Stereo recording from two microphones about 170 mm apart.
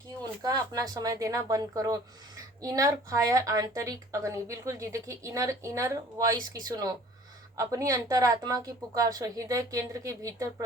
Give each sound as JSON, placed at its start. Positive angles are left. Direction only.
{"t": 0.2, "sound": "a woman's voice", "side_deg": -20}